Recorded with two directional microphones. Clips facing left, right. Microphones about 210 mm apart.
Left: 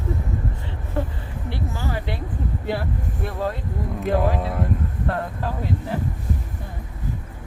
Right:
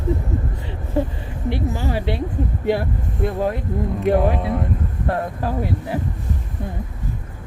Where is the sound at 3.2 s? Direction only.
20° right (ahead or behind).